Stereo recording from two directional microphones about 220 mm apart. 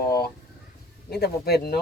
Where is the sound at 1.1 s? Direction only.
45° left (ahead or behind).